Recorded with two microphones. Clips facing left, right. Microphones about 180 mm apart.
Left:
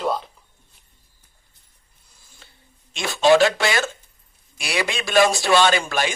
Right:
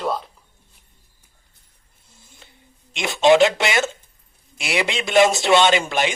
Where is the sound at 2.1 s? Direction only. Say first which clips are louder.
Right 3 dB; 20° right (ahead or behind).